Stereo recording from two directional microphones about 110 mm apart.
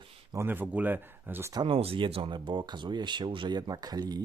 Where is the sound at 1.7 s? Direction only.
60° right (ahead or behind).